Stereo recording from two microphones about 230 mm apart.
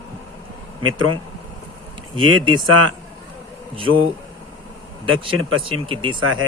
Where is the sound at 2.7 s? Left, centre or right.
Right.